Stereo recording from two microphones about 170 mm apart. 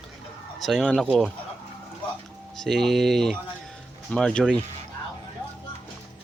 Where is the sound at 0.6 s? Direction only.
Centre (ahead or behind).